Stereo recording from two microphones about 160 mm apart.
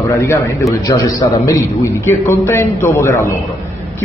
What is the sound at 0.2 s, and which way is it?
A man's voice, 20° left (ahead or behind).